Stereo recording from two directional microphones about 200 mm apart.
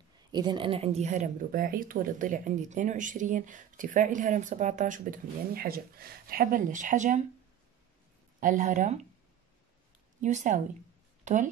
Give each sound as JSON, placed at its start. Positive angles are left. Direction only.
{"t": 0.3, "sound": "speech", "side_deg": -20}
{"t": 8.4, "sound": "speech", "side_deg": -40}
{"t": 10.2, "sound": "speech", "side_deg": -40}